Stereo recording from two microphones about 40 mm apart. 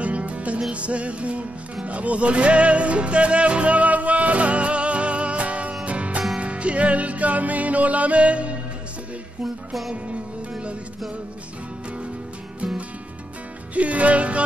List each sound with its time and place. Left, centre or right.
0.0 s music: right
13.7 s music: right